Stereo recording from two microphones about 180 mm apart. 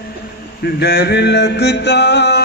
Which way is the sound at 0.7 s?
65° left (ahead or behind).